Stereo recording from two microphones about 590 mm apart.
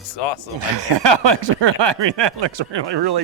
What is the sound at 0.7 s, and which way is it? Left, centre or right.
Speech, right.